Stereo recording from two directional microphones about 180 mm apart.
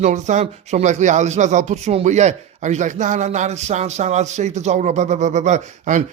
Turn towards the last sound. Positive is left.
turn(degrees=-45)  # may be behind; listen again after turning